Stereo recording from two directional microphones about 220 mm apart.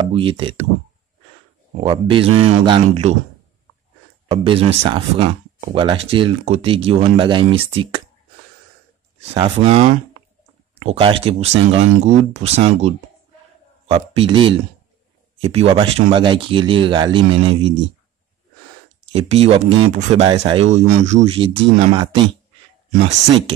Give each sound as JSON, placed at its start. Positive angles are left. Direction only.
{"t": 0.1, "sound": "speech", "side_deg": -25}
{"t": 1.8, "sound": "speech", "side_deg": -25}
{"t": 4.3, "sound": "speech", "side_deg": -25}
{"t": 9.3, "sound": "speech", "side_deg": -25}
{"t": 15.4, "sound": "speech", "side_deg": -25}
{"t": 19.1, "sound": "speech", "side_deg": -25}